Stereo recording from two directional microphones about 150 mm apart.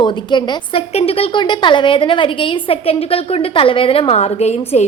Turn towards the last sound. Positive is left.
turn(degrees=45)  # may be behind; listen again after turning